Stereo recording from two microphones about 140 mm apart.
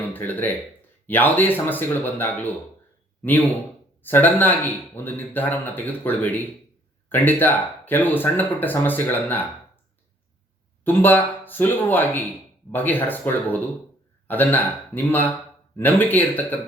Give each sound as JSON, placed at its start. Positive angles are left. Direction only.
{"t": 0.1, "sound": "speech", "side_deg": 15}
{"t": 4.0, "sound": "speech", "side_deg": 15}
{"t": 10.8, "sound": "speech", "side_deg": 15}